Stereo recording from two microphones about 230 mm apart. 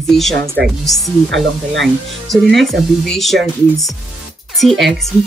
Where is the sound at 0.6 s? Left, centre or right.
Right.